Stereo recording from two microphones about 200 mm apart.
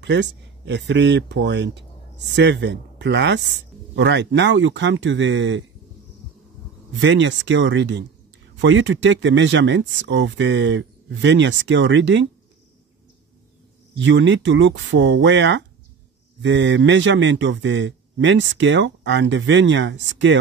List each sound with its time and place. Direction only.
0.0 s speech: 60° right (ahead or behind)
6.9 s speech: 65° right (ahead or behind)
13.9 s speech: 65° right (ahead or behind)